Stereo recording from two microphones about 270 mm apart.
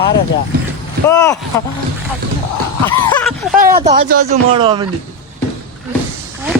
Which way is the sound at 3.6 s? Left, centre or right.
Right.